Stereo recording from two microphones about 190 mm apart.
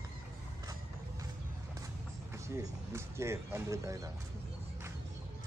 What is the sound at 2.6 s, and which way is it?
Speech, 15° right (ahead or behind).